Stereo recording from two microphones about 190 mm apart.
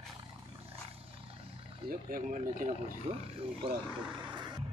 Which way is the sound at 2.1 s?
45° right (ahead or behind).